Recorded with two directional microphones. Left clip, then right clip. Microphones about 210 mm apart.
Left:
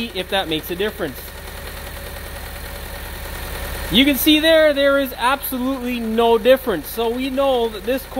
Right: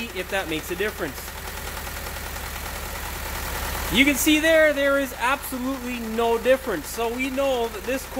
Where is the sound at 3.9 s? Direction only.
35° left (ahead or behind).